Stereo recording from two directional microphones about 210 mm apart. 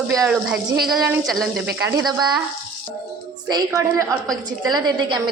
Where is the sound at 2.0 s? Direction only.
20° right (ahead or behind).